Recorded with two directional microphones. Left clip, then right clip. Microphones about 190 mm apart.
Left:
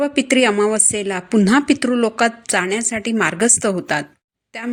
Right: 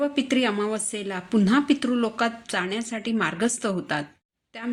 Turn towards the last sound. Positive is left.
turn(degrees=40)  # may be behind; listen again after turning